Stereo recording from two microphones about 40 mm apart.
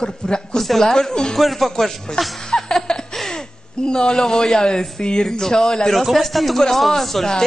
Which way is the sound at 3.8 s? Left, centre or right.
Centre.